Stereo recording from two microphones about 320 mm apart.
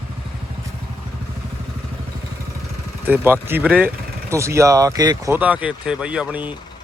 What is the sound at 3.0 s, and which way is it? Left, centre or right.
Speech, centre.